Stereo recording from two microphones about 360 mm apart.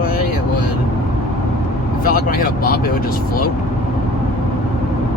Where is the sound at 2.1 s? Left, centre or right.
Left.